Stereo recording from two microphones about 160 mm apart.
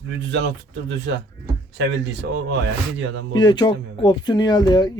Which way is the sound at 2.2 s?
90° right.